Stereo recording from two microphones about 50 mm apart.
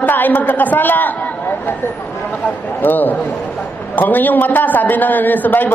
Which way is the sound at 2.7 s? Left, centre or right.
Left.